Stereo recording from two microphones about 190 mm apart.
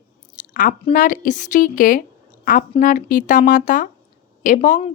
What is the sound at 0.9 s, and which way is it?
A woman's voice, 45° left (ahead or behind).